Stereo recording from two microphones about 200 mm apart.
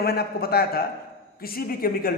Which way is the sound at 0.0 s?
50° left (ahead or behind).